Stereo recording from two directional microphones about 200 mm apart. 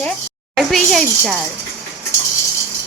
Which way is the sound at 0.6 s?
Centre (ahead or behind).